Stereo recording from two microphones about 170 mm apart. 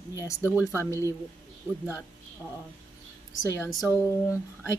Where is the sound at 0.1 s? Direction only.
15° left (ahead or behind).